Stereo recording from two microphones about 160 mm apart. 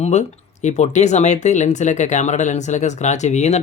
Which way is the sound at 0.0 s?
45° left (ahead or behind).